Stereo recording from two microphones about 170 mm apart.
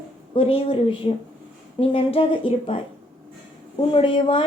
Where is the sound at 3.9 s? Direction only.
30° left (ahead or behind).